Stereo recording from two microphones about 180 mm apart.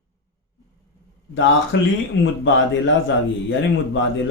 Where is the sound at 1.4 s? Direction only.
90° left.